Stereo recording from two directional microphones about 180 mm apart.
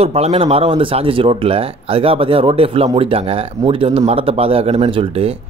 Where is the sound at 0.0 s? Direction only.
35° right (ahead or behind).